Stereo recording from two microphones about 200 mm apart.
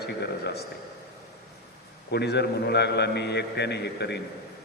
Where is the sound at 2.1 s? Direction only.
55° left (ahead or behind).